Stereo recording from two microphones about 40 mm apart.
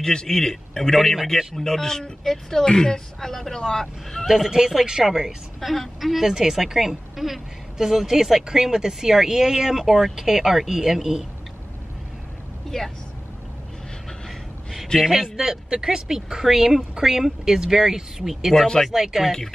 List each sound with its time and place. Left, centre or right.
0.0 s speech: centre
0.9 s speech: centre
4.5 s a woman's voice: centre
5.6 s a woman's voice: centre
12.7 s speech: centre
14.9 s a man's voice: left
15.3 s a woman's voice: centre